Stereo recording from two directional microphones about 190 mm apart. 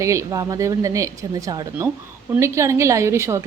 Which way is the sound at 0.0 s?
15° right (ahead or behind).